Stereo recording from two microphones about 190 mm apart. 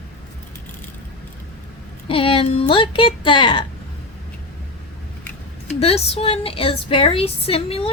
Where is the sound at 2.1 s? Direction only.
30° left (ahead or behind).